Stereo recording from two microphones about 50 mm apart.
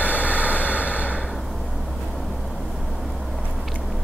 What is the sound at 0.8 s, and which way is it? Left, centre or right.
Snort, left.